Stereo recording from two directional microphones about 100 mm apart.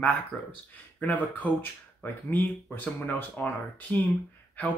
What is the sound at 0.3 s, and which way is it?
Speech, 5° left (ahead or behind).